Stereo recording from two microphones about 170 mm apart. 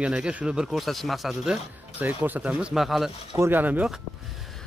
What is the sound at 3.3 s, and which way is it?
Speech, 15° right (ahead or behind).